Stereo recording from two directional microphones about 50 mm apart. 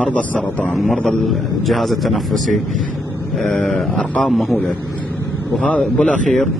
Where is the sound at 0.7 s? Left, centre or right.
Centre.